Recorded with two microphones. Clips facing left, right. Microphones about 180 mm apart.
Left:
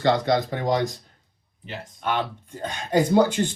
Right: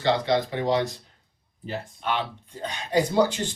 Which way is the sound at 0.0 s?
45° left (ahead or behind).